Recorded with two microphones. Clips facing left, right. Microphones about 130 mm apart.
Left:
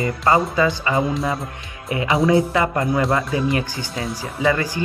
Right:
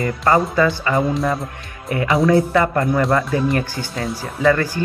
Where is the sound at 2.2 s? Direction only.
20° left (ahead or behind).